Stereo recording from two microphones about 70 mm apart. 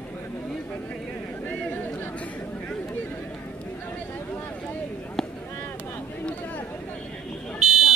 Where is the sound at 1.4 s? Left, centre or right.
Left.